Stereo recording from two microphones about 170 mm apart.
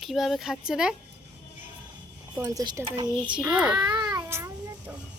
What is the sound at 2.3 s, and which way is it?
Speech, 15° right (ahead or behind).